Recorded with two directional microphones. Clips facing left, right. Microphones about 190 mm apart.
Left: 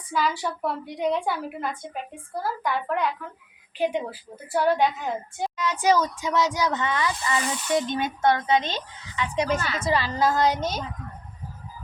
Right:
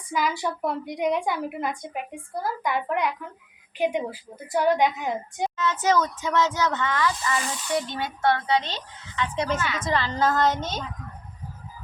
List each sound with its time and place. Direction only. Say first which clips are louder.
0.1 s a woman's voice: even; 15° right (ahead or behind)
5.5 s speech: left 1 dB; 15° left (ahead or behind)
9.6 s a woman's voice: right 1 dB; 35° left (ahead or behind)
9.8 s speech: left 1 dB; 10° left (ahead or behind)